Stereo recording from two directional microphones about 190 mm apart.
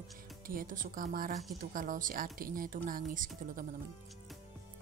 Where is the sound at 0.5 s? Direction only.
45° right (ahead or behind).